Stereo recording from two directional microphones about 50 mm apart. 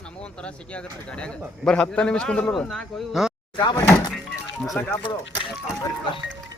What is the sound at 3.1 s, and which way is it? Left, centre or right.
Speech, centre.